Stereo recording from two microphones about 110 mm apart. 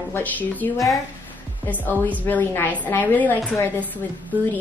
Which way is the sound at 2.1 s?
15° left (ahead or behind).